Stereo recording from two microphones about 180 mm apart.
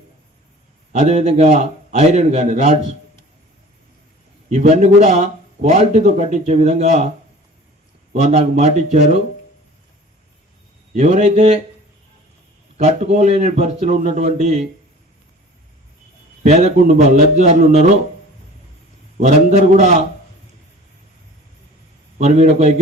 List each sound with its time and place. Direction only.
0.9 s speech: 40° right (ahead or behind)
4.4 s speech: 40° right (ahead or behind)
8.1 s speech: 35° right (ahead or behind)
10.9 s speech: 40° right (ahead or behind)
12.7 s speech: 40° right (ahead or behind)
16.4 s speech: 40° right (ahead or behind)
19.2 s speech: 40° right (ahead or behind)
22.2 s speech: 40° right (ahead or behind)